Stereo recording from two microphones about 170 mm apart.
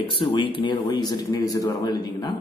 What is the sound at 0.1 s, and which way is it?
A man's voice, 30° left (ahead or behind).